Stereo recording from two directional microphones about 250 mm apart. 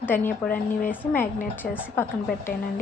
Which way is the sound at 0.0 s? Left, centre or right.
Centre.